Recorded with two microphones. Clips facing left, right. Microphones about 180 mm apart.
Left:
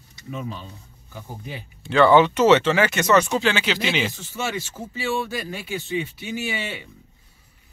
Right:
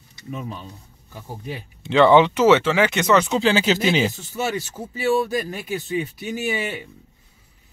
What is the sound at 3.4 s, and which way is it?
Speech, 35° right (ahead or behind).